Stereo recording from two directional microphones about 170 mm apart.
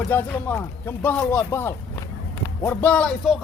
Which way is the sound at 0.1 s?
10° left (ahead or behind).